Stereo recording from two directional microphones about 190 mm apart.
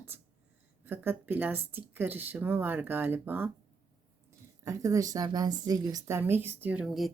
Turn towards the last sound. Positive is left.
turn(degrees=0)  # may be behind; listen again after turning